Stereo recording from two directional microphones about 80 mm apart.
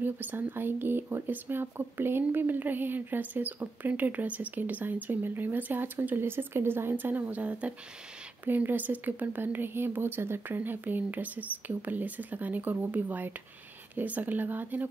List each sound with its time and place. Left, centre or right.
0.0 s speech: right